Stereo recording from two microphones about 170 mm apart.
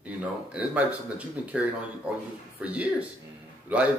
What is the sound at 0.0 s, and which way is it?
Speech, 10° right (ahead or behind).